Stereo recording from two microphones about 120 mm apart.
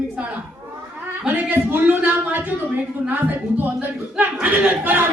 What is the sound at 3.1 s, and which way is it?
A woman's voice, 15° right (ahead or behind).